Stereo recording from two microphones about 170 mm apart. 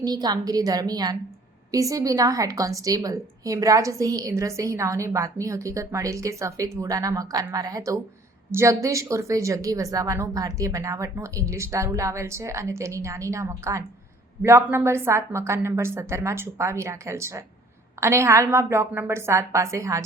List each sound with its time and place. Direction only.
0.0 s a woman's voice: 25° right (ahead or behind)